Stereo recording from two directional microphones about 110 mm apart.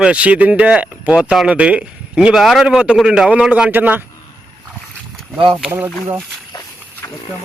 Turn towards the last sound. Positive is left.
turn(degrees=35)  # may be behind; listen again after turning